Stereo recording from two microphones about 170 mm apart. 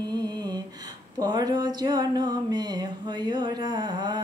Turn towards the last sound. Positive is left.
turn(degrees=-25)  # may be behind; listen again after turning